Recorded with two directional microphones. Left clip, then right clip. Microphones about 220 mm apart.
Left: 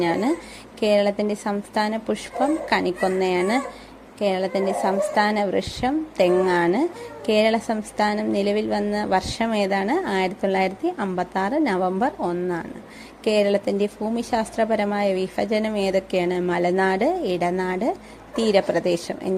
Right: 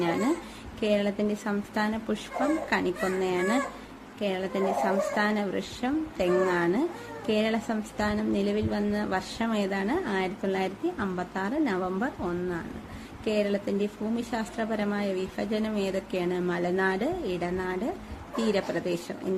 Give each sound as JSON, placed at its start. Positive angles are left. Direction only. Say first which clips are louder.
{"t": 0.0, "sound": "a woman's voice", "louder": "left 5 dB", "side_deg": 25}